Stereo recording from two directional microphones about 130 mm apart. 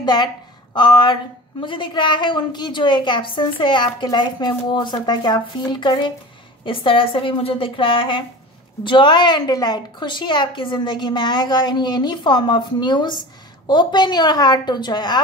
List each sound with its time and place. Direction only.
0.0 s a woman's voice: 35° left (ahead or behind)